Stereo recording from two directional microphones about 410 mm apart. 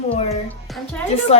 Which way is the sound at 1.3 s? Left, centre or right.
Centre.